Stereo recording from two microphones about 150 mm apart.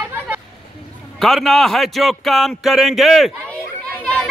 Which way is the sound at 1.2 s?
Centre (ahead or behind).